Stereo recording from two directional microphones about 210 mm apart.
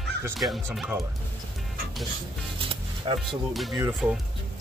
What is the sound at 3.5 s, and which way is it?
Speech, centre (ahead or behind).